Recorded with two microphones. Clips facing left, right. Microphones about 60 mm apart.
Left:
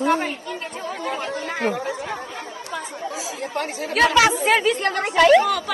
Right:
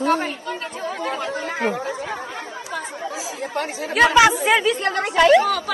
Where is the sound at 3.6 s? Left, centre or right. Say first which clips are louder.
Right 2 dB; right.